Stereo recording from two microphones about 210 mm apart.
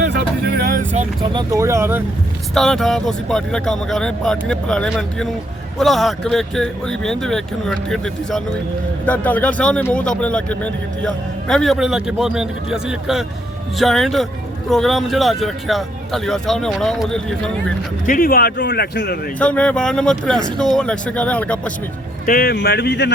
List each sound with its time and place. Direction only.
0.1 s music: 50° right (ahead or behind)
1.2 s speech: 20° right (ahead or behind)
2.6 s a man's voice: centre (ahead or behind)
18.0 s speech: 40° left (ahead or behind)
19.4 s a man's voice: 5° left (ahead or behind)
22.3 s speech: 45° left (ahead or behind)